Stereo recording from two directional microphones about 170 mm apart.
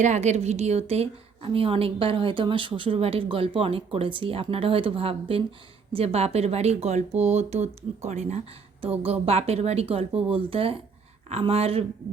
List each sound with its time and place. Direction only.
0.0 s a woman's voice: 45° right (ahead or behind)